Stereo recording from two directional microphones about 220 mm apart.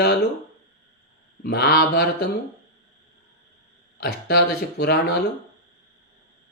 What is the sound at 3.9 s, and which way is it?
Speech, 45° left (ahead or behind).